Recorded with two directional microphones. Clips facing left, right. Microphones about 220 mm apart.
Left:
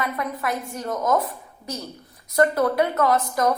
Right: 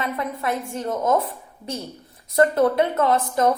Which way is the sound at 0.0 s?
25° right (ahead or behind).